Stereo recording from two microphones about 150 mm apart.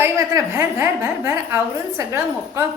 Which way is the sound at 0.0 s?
15° right (ahead or behind).